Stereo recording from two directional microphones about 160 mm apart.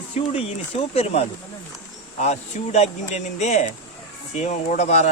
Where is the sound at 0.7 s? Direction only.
35° left (ahead or behind).